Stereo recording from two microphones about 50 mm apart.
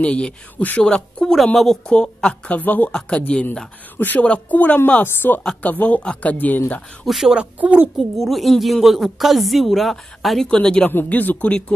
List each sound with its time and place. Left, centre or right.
0.0 s speech: left; by 1.8 s centre
1.9 s speech: centre
2.5 s speech: left
5.0 s speech: left
7.1 s a woman's voice: centre
7.3 s a woman's voice: right
8.0 s a woman's voice: centre
10.5 s speech: centre
11.1 s speech: left